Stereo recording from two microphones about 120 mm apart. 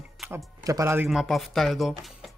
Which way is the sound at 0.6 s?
25° right (ahead or behind).